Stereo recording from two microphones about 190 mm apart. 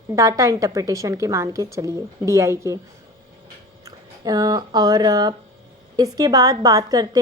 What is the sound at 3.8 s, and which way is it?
A woman's voice, 20° right (ahead or behind).